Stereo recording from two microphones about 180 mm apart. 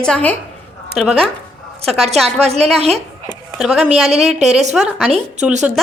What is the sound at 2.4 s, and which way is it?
Speech, 35° right (ahead or behind).